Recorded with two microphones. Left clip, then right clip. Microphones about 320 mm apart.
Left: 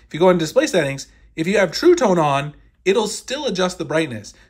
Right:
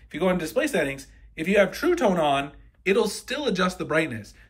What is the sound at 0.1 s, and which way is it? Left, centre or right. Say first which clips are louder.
Speech: left 9 dB; centre.